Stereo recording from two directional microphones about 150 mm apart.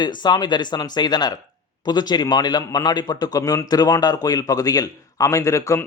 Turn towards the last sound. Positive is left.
turn(degrees=20)  # may be behind; listen again after turning